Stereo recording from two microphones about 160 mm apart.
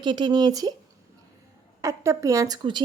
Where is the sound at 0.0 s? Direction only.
25° right (ahead or behind).